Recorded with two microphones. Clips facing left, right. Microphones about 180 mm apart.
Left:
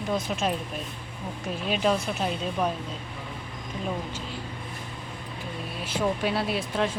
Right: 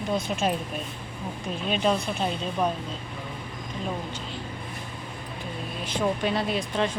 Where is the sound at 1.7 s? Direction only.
5° left (ahead or behind).